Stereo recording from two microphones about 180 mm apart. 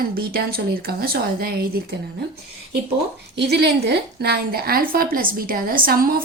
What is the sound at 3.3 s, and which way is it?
A woman's voice, 70° right (ahead or behind).